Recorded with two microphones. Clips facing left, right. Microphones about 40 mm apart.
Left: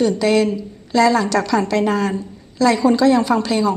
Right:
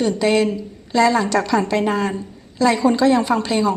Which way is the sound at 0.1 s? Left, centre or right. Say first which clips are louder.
Left 1 dB; centre.